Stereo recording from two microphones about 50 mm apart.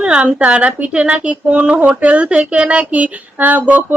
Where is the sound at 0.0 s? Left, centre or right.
Right.